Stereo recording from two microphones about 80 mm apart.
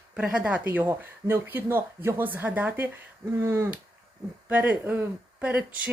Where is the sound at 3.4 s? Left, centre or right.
Right.